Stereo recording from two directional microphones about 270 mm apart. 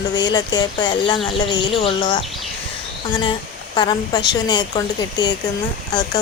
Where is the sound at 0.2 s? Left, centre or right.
Centre.